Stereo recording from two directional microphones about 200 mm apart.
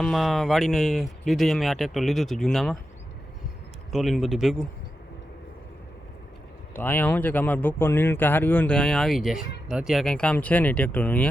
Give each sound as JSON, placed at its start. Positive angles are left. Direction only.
{"t": 0.0, "sound": "speech", "side_deg": 0}
{"t": 3.9, "sound": "speech", "side_deg": 0}
{"t": 6.7, "sound": "speech", "side_deg": 10}